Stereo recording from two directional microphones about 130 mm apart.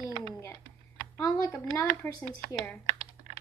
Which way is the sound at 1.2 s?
25° left (ahead or behind).